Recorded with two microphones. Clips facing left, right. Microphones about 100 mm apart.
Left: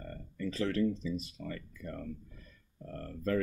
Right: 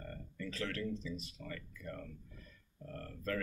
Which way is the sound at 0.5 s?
20° left (ahead or behind).